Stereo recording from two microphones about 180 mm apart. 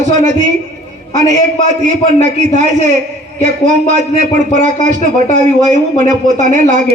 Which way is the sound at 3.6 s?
40° right (ahead or behind).